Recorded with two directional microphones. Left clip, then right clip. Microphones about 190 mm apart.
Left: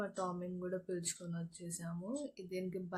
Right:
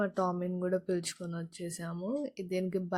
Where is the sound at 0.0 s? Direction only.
40° right (ahead or behind).